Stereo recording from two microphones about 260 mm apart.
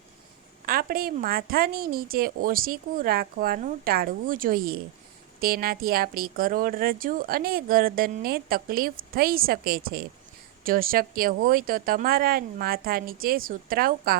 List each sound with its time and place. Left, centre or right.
0.6 s a woman's voice: right